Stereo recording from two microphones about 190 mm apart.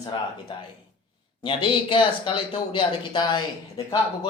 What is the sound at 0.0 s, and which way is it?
Speech, 20° left (ahead or behind).